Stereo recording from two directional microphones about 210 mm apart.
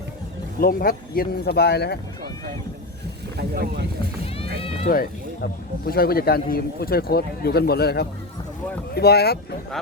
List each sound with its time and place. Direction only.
0.6 s speech: 45° left (ahead or behind)
3.3 s speech: 50° right (ahead or behind)
4.9 s speech: 45° left (ahead or behind)